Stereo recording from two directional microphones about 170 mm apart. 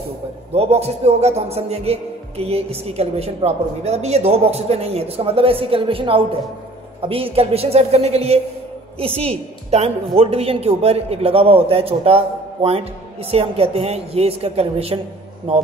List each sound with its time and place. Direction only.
0.5 s a man's voice: 35° right (ahead or behind)